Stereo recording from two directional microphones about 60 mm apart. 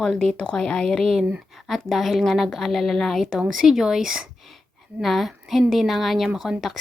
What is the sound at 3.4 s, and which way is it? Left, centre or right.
A woman's voice, centre.